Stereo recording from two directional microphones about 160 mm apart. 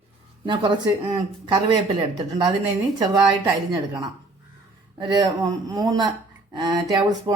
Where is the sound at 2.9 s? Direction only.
25° right (ahead or behind).